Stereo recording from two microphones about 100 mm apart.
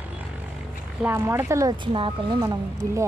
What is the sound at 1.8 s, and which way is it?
Speech, 55° right (ahead or behind).